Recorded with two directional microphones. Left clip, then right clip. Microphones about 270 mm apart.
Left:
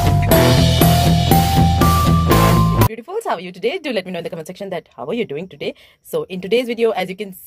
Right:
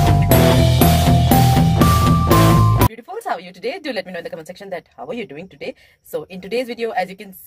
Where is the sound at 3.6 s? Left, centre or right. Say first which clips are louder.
Left 4 dB; left.